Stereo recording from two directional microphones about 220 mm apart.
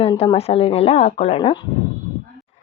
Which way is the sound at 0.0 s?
20° left (ahead or behind).